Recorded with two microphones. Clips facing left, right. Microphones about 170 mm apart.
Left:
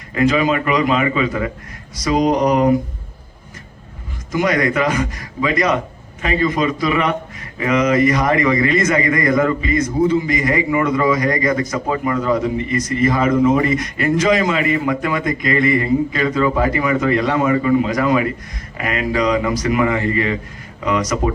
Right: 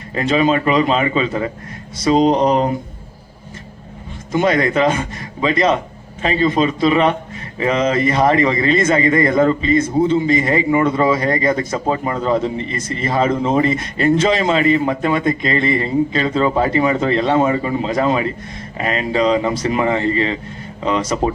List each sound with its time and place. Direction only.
0.1 s a man's voice: 25° right (ahead or behind)
4.3 s a man's voice: 25° right (ahead or behind)